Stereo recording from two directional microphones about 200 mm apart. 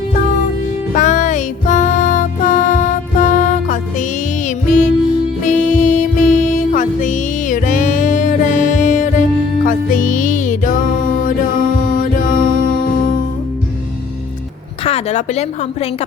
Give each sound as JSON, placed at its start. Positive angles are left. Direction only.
{"t": 0.9, "sound": "music", "side_deg": 40}
{"t": 12.5, "sound": "music", "side_deg": 45}
{"t": 14.8, "sound": "a woman's voice", "side_deg": 35}